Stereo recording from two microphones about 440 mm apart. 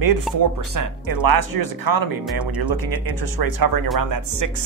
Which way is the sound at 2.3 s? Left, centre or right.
Centre.